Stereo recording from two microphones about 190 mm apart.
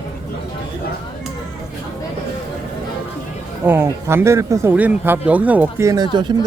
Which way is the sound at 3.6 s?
10° right (ahead or behind).